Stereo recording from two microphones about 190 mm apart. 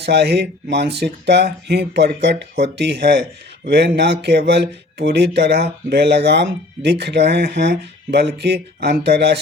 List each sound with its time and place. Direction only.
0.0 s speech: 60° right (ahead or behind)